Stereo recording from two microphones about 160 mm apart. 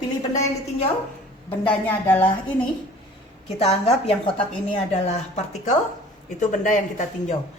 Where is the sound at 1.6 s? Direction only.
10° left (ahead or behind).